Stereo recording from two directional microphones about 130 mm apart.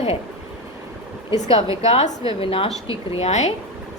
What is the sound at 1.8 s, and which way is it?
A woman's voice, 55° left (ahead or behind).